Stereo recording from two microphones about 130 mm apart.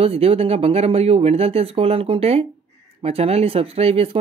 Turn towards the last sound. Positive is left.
turn(degrees=-50)  # may be behind; listen again after turning